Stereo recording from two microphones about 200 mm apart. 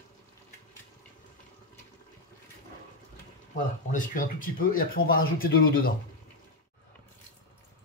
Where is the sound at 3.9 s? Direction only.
40° left (ahead or behind).